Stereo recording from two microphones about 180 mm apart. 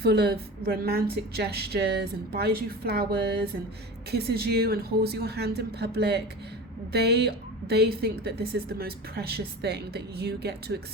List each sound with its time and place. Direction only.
0.0 s a woman's voice: 65° right (ahead or behind)